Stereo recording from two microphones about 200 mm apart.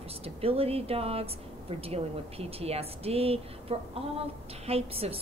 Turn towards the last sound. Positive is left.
turn(degrees=-30)  # may be behind; listen again after turning